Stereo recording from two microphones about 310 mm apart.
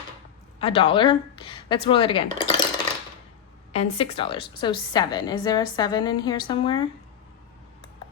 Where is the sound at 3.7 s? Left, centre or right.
Centre.